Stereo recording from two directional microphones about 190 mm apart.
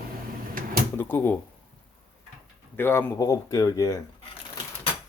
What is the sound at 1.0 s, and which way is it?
Speech, 10° left (ahead or behind).